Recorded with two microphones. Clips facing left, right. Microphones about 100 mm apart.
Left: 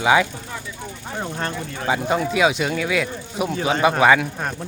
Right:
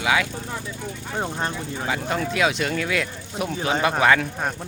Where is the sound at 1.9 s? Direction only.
15° left (ahead or behind).